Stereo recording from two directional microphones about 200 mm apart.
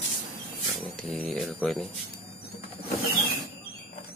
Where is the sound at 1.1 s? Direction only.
Centre (ahead or behind).